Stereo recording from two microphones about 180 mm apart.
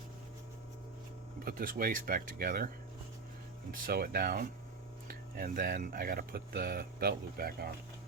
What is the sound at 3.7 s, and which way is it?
Speech, 55° right (ahead or behind).